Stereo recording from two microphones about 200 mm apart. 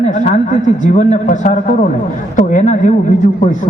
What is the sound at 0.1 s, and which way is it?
A man's voice, 40° left (ahead or behind).